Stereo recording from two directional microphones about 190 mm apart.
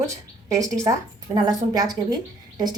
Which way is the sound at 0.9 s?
20° right (ahead or behind).